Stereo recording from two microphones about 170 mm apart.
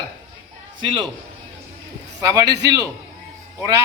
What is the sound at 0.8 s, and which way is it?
Speech, 30° right (ahead or behind).